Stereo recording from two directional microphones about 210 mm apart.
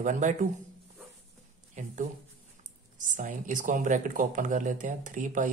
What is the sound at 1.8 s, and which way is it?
Speech, 35° right (ahead or behind).